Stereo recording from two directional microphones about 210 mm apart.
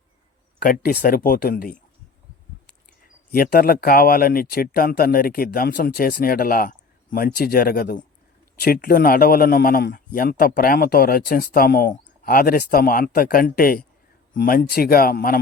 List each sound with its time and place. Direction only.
0.6 s a man's voice: 45° left (ahead or behind)
3.3 s a man's voice: 45° left (ahead or behind)